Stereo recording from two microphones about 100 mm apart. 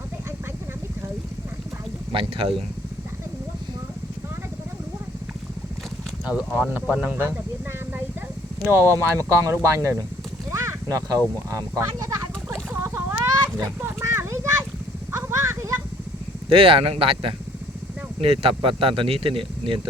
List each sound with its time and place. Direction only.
2.1 s speech: 65° right (ahead or behind)
6.2 s speech: 10° right (ahead or behind)
8.6 s speech: 25° right (ahead or behind)
10.5 s a sound: 30° right (ahead or behind)
15.1 s vehicle: 25° right (ahead or behind)
16.5 s speech: 65° right (ahead or behind)